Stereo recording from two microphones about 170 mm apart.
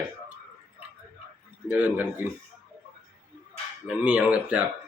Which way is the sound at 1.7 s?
10° right (ahead or behind).